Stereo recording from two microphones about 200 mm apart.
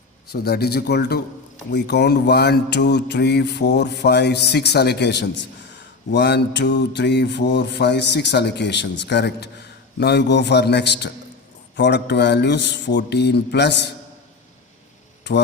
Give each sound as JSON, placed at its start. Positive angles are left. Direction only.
{"t": 0.3, "sound": "speech", "side_deg": 50}
{"t": 15.3, "sound": "speech", "side_deg": 60}